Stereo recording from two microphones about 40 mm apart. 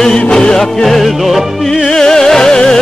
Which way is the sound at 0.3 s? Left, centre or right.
Centre.